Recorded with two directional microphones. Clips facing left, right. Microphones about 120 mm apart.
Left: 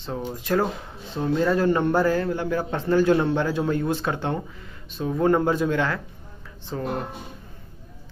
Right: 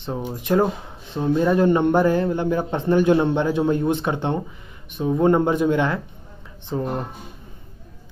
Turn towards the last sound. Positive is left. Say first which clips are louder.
# right 4 dB
turn(degrees=-20)  # may be behind; listen again after turning